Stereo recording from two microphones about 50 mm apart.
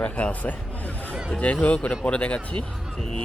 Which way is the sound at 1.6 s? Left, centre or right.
Left.